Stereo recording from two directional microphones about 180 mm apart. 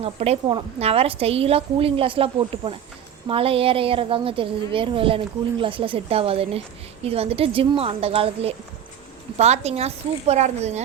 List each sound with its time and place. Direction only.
0.0 s a woman's voice: 35° right (ahead or behind)